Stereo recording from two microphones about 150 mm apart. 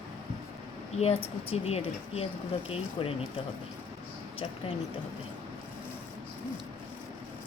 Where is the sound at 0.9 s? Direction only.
45° left (ahead or behind).